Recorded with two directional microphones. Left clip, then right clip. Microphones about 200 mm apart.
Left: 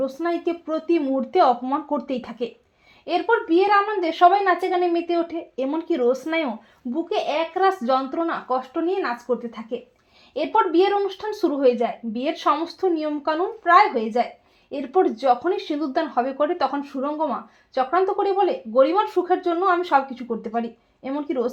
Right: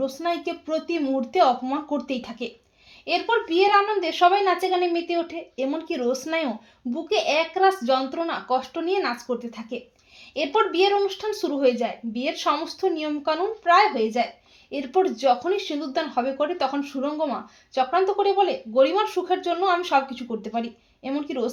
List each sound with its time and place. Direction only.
0.0 s speech: 30° left (ahead or behind)